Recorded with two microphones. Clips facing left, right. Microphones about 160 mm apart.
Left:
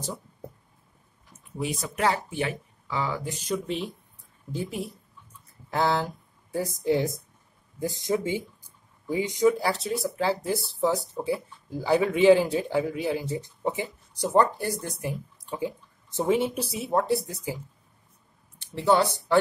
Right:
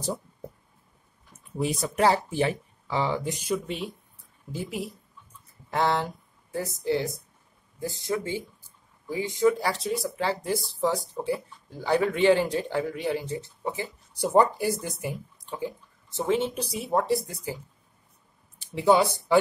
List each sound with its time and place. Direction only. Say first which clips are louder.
1.6 s speech: right 3 dB; 35° right (ahead or behind)
3.3 s speech: even; 5° right (ahead or behind)
5.7 s a sound: even; centre (ahead or behind)
6.6 s speech: left 2 dB; 15° left (ahead or behind)
9.5 s speech: left 1 dB; centre (ahead or behind)
13.4 s speech: left 3 dB; 20° left (ahead or behind)
14.1 s speech: right 1 dB; 10° right (ahead or behind)
16.2 s speech: left 2 dB; 10° left (ahead or behind)
18.6 s speech: right 1 dB; 10° right (ahead or behind)